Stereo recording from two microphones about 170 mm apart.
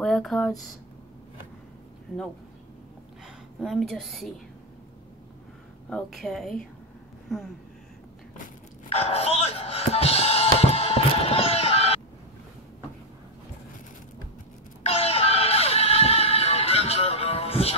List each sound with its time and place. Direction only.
0.0 s speech: centre (ahead or behind)
3.5 s a woman's voice: centre (ahead or behind)
5.9 s a woman's voice: 5° left (ahead or behind)
8.8 s music: 35° left (ahead or behind)
14.8 s music: 35° left (ahead or behind)